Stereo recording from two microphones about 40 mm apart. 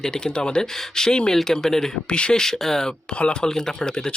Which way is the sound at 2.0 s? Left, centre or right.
Left.